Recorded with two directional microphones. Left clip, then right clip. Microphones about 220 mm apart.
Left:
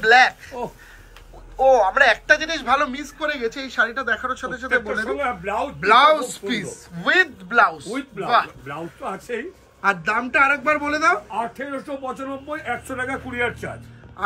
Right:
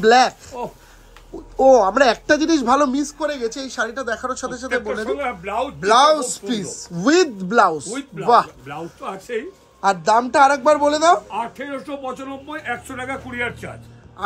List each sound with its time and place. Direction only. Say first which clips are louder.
0.0 s a man's voice: even; 35° right (ahead or behind)
1.6 s a man's voice: right 2 dB; 40° right (ahead or behind)
3.0 s speech: right 2 dB; 15° right (ahead or behind)
4.6 s a woman's voice: left 1 dB; 10° right (ahead or behind)
5.8 s speech: even; 15° right (ahead or behind)
7.5 s a man's voice: right 1 dB; 35° right (ahead or behind)
8.6 s a woman's voice: even; 5° right (ahead or behind)